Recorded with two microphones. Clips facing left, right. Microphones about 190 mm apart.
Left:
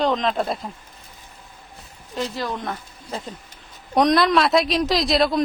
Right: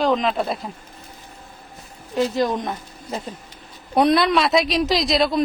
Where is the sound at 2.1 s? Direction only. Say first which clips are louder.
Right 7 dB; 20° right (ahead or behind).